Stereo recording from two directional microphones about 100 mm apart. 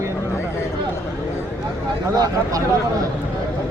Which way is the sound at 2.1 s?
40° right (ahead or behind).